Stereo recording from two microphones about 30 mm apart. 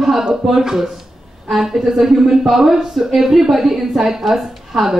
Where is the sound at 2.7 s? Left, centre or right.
Centre.